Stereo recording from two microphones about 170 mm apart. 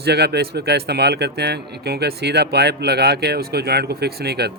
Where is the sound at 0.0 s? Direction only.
75° right (ahead or behind).